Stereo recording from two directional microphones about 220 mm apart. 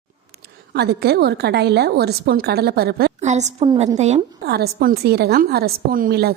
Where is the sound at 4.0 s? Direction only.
30° right (ahead or behind).